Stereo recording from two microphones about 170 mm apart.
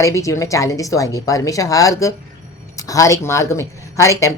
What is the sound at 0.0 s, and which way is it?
A woman's voice, 20° left (ahead or behind).